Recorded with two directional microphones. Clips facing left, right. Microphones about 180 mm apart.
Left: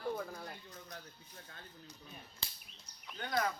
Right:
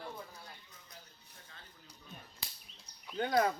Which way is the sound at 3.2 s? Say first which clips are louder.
Right 5 dB; 30° right (ahead or behind).